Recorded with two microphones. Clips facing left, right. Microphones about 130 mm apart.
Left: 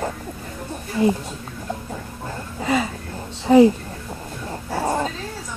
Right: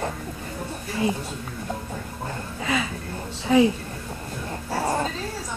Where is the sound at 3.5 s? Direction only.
40° left (ahead or behind).